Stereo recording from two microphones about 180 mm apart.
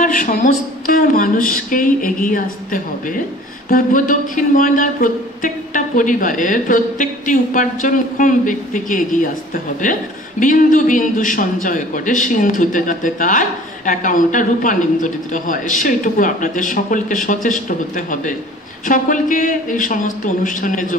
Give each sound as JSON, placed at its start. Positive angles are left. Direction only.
{"t": 0.0, "sound": "a man's voice", "side_deg": 50}